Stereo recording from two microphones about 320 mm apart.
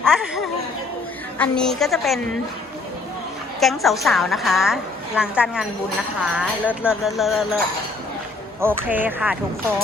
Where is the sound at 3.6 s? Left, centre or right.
Centre.